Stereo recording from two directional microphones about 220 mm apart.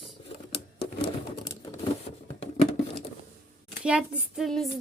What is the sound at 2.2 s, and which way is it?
Patter, 25° left (ahead or behind).